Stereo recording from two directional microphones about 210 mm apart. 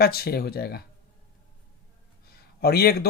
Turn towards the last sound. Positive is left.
turn(degrees=50)  # may be behind; listen again after turning